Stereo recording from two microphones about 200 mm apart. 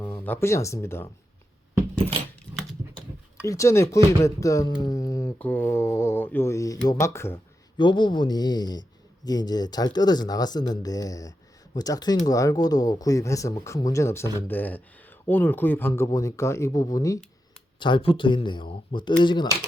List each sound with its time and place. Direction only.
0.0 s speech: 10° left (ahead or behind)
3.4 s speech: 15° left (ahead or behind)